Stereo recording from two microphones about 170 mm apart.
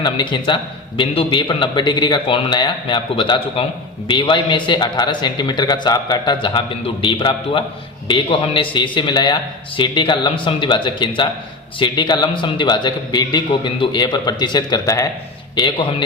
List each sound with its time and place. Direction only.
0.0 s a man's voice: 25° left (ahead or behind)